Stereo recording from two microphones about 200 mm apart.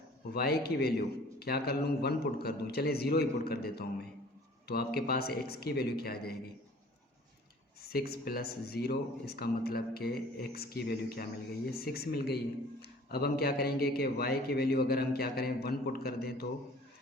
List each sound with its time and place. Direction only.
0.3 s a man's voice: 50° left (ahead or behind)
7.8 s a man's voice: 50° left (ahead or behind)